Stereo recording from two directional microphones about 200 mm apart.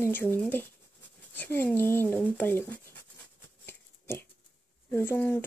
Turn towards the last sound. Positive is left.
turn(degrees=10)  # may be behind; listen again after turning